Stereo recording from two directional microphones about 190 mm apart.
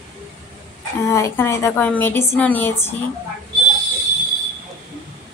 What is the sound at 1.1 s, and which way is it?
Speech, 15° left (ahead or behind).